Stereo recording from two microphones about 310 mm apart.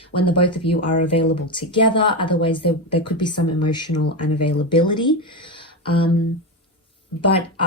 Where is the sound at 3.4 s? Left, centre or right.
Left.